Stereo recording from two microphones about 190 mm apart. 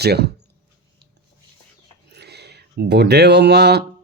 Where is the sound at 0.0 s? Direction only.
60° right (ahead or behind).